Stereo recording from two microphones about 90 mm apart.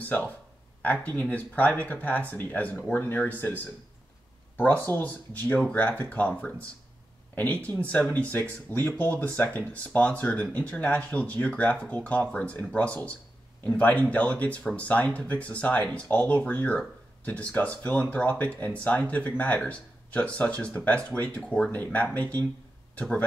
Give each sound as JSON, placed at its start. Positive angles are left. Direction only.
{"t": 0.0, "sound": "speech", "side_deg": 20}
{"t": 4.8, "sound": "speech", "side_deg": 20}